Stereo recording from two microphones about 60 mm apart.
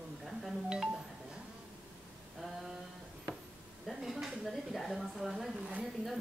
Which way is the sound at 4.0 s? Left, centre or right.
Centre.